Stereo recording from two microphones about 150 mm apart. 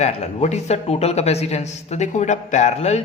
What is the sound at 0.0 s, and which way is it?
A man's voice, 50° left (ahead or behind).